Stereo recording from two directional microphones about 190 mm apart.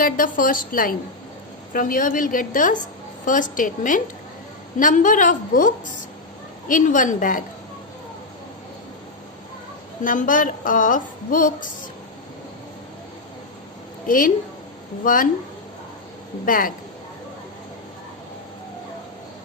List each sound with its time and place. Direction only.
0.0 s a woman's voice: 45° left (ahead or behind)
10.0 s a woman's voice: 45° left (ahead or behind)
14.1 s a woman's voice: 45° left (ahead or behind)
16.5 s a woman's voice: 45° left (ahead or behind)